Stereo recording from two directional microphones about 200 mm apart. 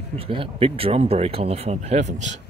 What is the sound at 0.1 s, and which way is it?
Speech, 25° right (ahead or behind).